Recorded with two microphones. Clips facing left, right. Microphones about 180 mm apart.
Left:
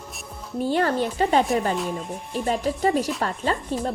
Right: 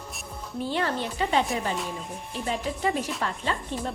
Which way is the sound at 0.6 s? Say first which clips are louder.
Left 6 dB; 45° left (ahead or behind).